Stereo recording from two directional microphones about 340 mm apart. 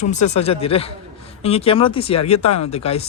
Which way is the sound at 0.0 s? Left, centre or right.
Left.